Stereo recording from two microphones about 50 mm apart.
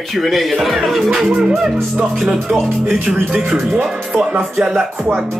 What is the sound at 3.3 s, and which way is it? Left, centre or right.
Speech, right.